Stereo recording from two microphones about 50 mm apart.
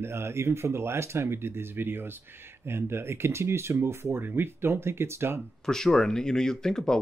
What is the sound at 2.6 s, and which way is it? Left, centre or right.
Speech, right.